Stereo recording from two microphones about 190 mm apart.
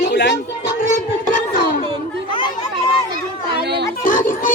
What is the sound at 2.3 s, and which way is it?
Speech, 25° left (ahead or behind).